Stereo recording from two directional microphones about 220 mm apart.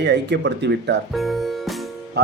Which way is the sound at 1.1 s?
Centre (ahead or behind).